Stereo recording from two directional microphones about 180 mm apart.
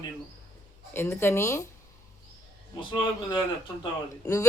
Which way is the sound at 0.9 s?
10° left (ahead or behind).